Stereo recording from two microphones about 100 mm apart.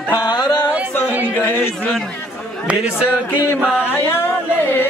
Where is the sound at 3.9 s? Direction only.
20° left (ahead or behind).